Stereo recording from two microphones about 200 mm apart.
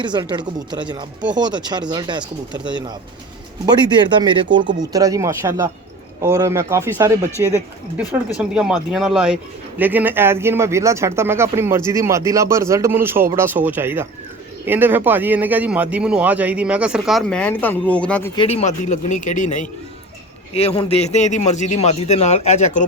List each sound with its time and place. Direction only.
0.0 s speech: 20° right (ahead or behind)
4.8 s a man's voice: 15° right (ahead or behind); by 18.3 s 5° left (ahead or behind)
18.3 s a man's voice: 30° left (ahead or behind)